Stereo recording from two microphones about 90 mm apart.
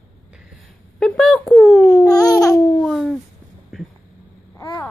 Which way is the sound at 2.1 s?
40° left (ahead or behind).